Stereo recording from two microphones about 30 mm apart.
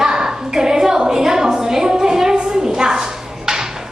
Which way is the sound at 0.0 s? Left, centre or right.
Centre.